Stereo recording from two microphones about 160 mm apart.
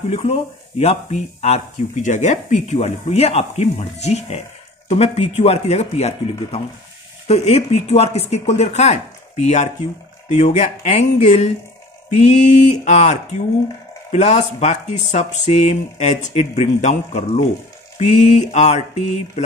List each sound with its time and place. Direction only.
0.1 s speech: 40° left (ahead or behind)